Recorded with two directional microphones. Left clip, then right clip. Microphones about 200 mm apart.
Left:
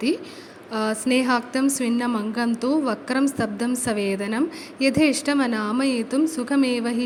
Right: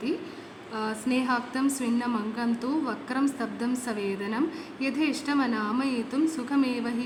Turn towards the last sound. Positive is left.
turn(degrees=30)  # may be behind; listen again after turning